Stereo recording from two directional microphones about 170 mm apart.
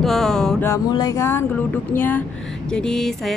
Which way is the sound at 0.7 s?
20° left (ahead or behind).